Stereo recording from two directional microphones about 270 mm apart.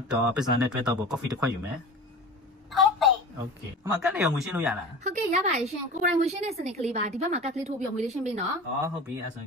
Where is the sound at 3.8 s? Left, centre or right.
Centre.